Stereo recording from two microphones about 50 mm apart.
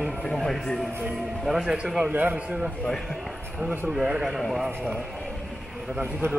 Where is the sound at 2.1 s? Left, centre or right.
Right.